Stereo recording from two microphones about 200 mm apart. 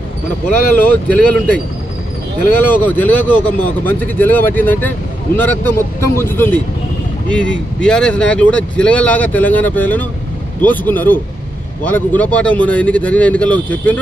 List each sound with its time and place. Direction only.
0.7 s speech: 10° left (ahead or behind)
2.7 s speech: 10° left (ahead or behind)